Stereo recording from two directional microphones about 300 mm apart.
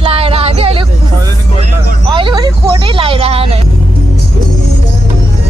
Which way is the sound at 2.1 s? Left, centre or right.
Centre.